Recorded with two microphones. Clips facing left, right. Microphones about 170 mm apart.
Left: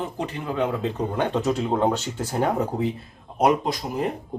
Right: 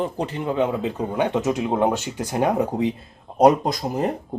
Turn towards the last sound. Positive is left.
turn(degrees=-40)  # may be behind; listen again after turning